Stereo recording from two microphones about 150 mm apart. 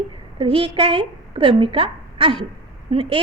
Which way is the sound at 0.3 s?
35° right (ahead or behind).